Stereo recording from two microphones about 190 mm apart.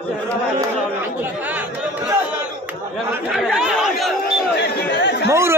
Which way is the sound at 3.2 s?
Centre (ahead or behind).